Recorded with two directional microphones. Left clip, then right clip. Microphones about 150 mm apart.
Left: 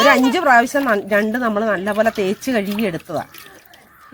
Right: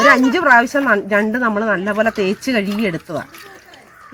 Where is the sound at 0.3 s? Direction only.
10° left (ahead or behind).